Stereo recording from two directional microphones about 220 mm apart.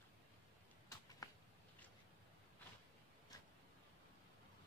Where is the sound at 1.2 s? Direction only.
15° left (ahead or behind).